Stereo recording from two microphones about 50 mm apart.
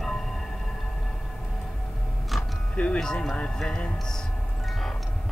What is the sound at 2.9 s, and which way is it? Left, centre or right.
Speech, centre.